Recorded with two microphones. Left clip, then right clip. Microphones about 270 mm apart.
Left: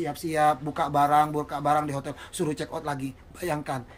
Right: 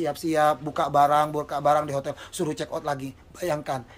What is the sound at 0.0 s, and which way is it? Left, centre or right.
Speech, centre.